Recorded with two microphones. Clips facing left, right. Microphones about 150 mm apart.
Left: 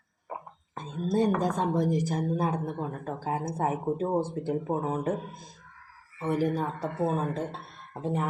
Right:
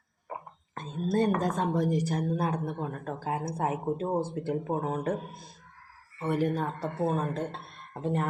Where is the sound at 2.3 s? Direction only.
15° left (ahead or behind).